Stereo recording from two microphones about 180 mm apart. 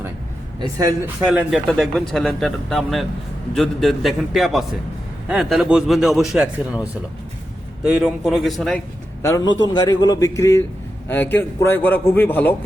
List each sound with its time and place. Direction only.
1.0 s speech: 5° right (ahead or behind)
9.2 s a man's voice: 20° left (ahead or behind)